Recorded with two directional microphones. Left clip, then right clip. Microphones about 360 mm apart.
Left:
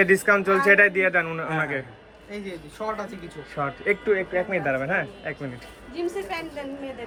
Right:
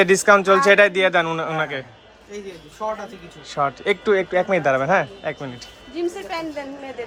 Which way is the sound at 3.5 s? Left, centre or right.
Centre.